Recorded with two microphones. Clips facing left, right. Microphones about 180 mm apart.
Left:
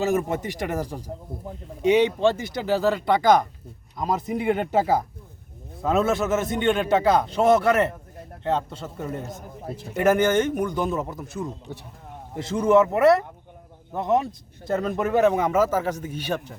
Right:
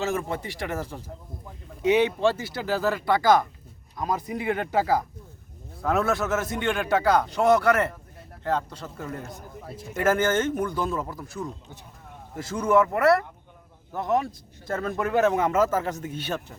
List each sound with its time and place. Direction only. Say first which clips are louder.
0.0 s speech: left 5 dB; 20° left (ahead or behind)
2.4 s a man's voice: left 4 dB; 20° left (ahead or behind)
4.0 s speech: left 3 dB; centre (ahead or behind)
4.5 s a man's voice: even; 20° left (ahead or behind)